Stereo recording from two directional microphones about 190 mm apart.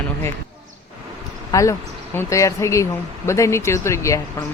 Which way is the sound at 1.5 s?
15° left (ahead or behind).